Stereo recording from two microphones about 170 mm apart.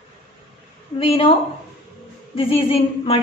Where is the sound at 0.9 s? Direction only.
35° left (ahead or behind).